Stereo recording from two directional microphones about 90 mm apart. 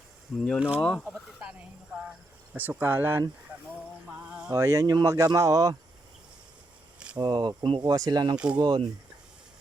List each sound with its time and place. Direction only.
0.3 s speech: 5° left (ahead or behind)
2.6 s speech: 20° right (ahead or behind)
4.3 s a sound: 10° right (ahead or behind)
4.5 s speech: 30° right (ahead or behind)
7.2 s speech: 55° right (ahead or behind)
7.9 s speech: 45° right (ahead or behind)